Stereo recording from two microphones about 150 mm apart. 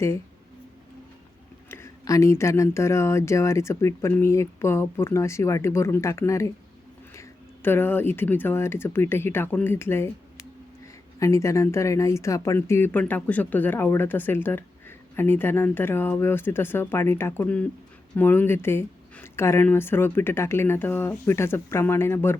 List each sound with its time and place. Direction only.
1.7 s speech: 20° left (ahead or behind)
11.2 s speech: 20° left (ahead or behind)